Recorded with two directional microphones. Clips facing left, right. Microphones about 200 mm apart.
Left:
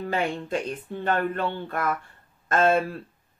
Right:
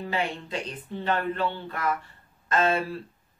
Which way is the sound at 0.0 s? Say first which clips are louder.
Left 3 dB; 50° left (ahead or behind).